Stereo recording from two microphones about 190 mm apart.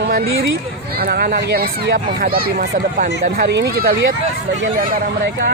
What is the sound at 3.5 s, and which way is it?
Speech, 55° right (ahead or behind).